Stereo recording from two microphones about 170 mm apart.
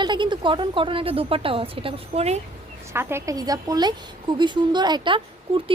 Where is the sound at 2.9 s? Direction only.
15° right (ahead or behind).